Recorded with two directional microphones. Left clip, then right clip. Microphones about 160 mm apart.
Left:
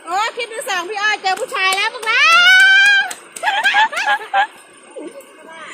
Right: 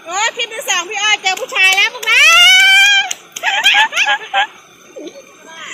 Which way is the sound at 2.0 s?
70° left (ahead or behind).